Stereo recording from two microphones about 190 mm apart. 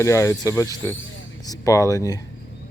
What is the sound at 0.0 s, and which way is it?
Speech, 15° left (ahead or behind).